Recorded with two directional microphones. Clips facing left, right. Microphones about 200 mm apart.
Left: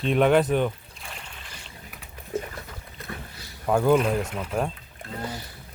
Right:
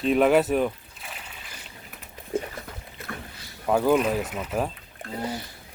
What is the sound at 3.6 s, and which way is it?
Speech, 5° right (ahead or behind).